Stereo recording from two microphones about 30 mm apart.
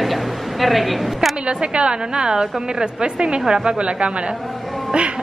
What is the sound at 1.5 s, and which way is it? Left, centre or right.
A woman's voice, right.